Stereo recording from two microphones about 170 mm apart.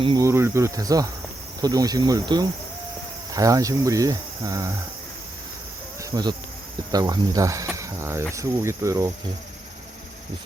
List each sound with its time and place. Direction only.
0.0 s speech: 25° right (ahead or behind)
6.0 s cricket: 20° right (ahead or behind)
6.9 s speech: 20° right (ahead or behind)